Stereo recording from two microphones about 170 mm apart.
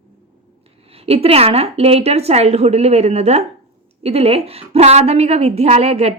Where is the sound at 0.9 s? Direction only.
35° right (ahead or behind).